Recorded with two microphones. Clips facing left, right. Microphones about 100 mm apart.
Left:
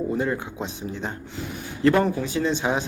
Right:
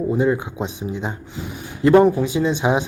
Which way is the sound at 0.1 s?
15° right (ahead or behind).